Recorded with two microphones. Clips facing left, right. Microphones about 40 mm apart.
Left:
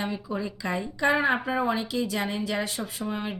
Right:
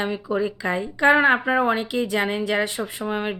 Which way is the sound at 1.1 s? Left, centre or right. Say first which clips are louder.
Right 7 dB; right.